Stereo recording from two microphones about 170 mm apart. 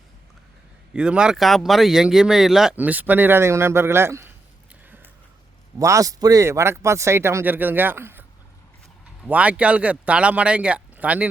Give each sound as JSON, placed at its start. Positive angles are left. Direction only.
{"t": 0.9, "sound": "speech", "side_deg": -5}
{"t": 5.8, "sound": "speech", "side_deg": -20}
{"t": 9.2, "sound": "speech", "side_deg": -10}